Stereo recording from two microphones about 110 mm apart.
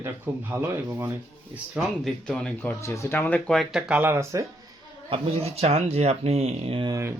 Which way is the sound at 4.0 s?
20° right (ahead or behind).